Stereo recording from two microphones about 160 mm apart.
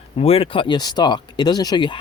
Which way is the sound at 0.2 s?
35° left (ahead or behind).